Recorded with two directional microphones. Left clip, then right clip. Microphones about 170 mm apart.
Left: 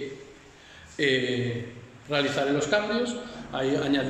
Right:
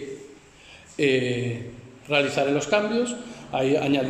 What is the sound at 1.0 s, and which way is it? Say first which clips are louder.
A man's voice: right 2 dB; 10° right (ahead or behind).